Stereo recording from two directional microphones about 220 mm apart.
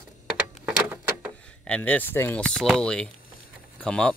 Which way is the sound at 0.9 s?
10° right (ahead or behind).